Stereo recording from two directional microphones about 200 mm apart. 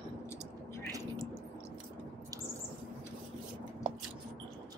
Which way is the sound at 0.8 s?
15° right (ahead or behind).